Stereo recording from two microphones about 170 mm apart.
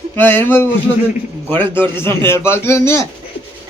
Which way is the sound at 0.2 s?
10° left (ahead or behind).